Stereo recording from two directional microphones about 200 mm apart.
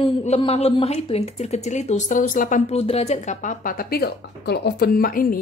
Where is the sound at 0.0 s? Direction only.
30° left (ahead or behind).